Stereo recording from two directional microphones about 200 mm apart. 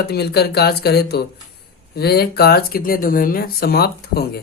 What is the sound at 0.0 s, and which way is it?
Speech, 55° left (ahead or behind).